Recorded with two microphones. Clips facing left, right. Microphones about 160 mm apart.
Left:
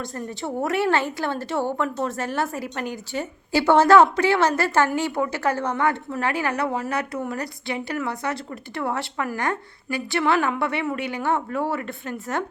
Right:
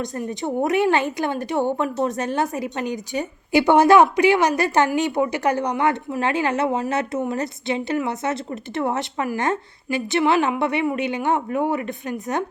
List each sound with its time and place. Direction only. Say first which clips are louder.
0.0 s a woman's voice: right 4 dB; 20° right (ahead or behind)